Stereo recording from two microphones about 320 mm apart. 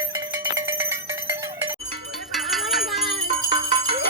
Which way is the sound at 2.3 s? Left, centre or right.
Centre.